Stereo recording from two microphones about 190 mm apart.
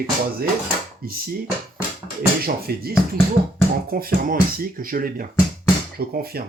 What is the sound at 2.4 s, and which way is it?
Speech, 55° right (ahead or behind).